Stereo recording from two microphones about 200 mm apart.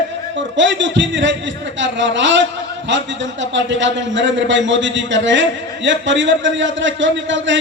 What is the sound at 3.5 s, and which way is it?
A man's voice, 65° right (ahead or behind).